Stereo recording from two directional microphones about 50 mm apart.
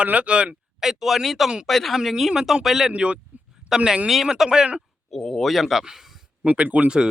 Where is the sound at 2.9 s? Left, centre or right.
Right.